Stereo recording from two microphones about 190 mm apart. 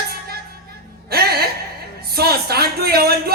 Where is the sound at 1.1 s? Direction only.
55° right (ahead or behind).